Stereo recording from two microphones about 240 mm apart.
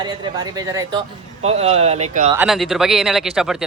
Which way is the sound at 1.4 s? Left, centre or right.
Right.